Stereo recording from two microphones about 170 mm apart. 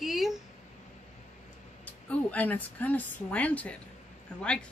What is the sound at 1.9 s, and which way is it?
A woman's voice, 10° left (ahead or behind).